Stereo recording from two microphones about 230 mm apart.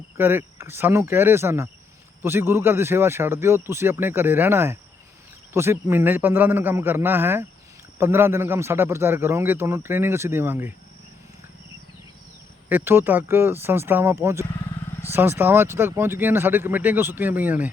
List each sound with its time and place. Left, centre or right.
0.2 s a man's voice: centre
12.6 s a man's voice: centre